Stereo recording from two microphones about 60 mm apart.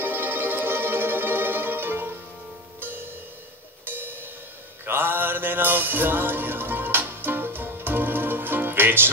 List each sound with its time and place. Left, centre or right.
0.0 s music: right
4.8 s mantra: right